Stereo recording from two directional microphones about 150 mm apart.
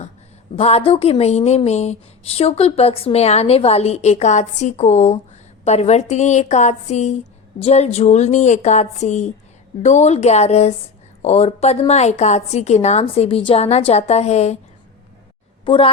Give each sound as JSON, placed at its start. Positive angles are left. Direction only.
{"t": 0.5, "sound": "speech", "side_deg": 40}
{"t": 15.6, "sound": "a woman's voice", "side_deg": 30}